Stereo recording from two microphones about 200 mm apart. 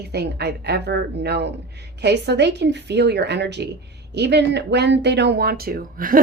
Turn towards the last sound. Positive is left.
turn(degrees=-45)  # may be behind; listen again after turning